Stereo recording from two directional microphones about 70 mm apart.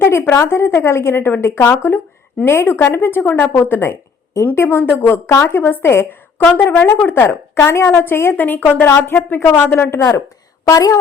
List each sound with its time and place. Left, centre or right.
0.0 s a woman's voice: left
8.4 s a woman's voice: left
10.7 s a woman's voice: left